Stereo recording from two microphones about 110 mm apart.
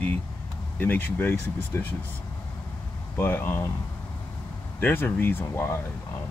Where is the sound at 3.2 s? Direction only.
20° left (ahead or behind).